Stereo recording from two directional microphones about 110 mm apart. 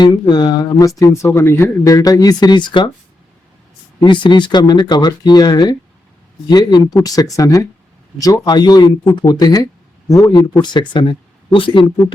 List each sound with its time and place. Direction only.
0.0 s speech: 40° left (ahead or behind)
4.0 s speech: 45° left (ahead or behind)